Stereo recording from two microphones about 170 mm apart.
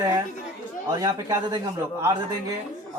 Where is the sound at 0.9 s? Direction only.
20° right (ahead or behind).